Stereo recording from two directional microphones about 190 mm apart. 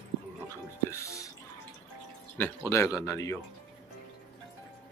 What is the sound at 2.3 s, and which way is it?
Speech, 10° left (ahead or behind).